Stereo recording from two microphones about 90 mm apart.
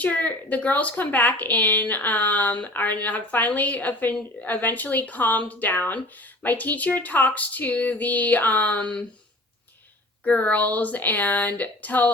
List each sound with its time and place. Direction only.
0.0 s speech: 15° left (ahead or behind)
10.2 s speech: 15° left (ahead or behind)